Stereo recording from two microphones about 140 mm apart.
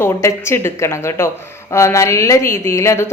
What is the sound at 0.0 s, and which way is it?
A woman's voice, 20° left (ahead or behind).